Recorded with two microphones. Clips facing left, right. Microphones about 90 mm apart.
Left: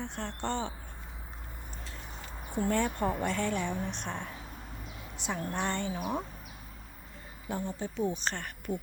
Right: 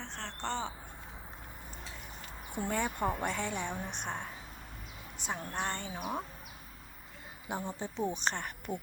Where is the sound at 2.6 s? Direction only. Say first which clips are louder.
Left 3 dB; 5° right (ahead or behind).